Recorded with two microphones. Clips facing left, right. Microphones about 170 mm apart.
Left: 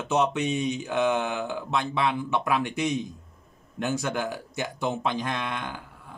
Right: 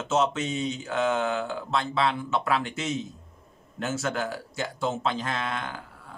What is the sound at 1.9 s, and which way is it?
A man's voice, 15° left (ahead or behind).